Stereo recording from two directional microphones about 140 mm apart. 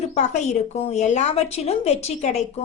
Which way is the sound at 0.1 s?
55° left (ahead or behind).